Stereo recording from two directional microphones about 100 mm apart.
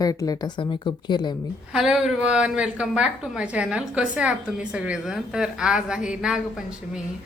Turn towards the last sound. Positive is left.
turn(degrees=-5)  # may be behind; listen again after turning